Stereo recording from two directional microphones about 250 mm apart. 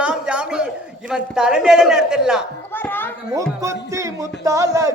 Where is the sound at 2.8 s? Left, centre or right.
Centre.